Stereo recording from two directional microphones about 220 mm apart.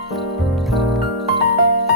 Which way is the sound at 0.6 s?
Centre (ahead or behind).